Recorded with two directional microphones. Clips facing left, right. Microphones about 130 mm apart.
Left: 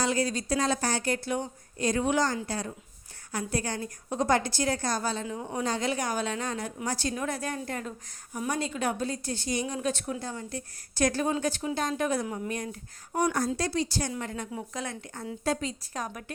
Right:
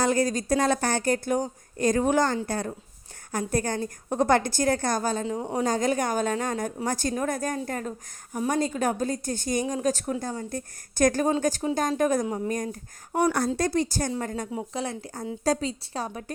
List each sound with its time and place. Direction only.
0.0 s a woman's voice: 45° right (ahead or behind)
5.2 s a woman's voice: 30° right (ahead or behind)
5.6 s a woman's voice: 45° right (ahead or behind)
13.1 s speech: 70° right (ahead or behind)
13.6 s a woman's voice: 50° right (ahead or behind)
14.5 s a woman's voice: 30° right (ahead or behind)